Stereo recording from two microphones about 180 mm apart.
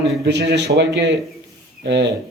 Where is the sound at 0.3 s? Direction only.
70° right (ahead or behind).